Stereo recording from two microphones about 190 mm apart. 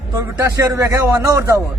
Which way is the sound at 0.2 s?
15° right (ahead or behind).